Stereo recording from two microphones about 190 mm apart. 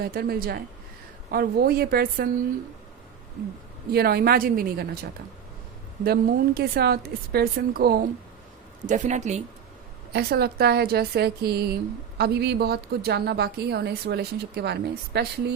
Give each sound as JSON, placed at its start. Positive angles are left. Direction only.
{"t": 0.0, "sound": "a woman's voice", "side_deg": -55}
{"t": 3.9, "sound": "a woman's voice", "side_deg": -55}
{"t": 6.1, "sound": "a woman's voice", "side_deg": -55}
{"t": 8.9, "sound": "speech", "side_deg": -40}
{"t": 10.1, "sound": "a woman's voice", "side_deg": -60}